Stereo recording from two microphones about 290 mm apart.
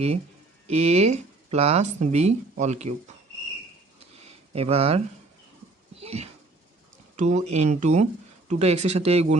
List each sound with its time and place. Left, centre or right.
0.7 s speech: right
4.2 s a sound: right
6.0 s wheeze: right
7.2 s speech: right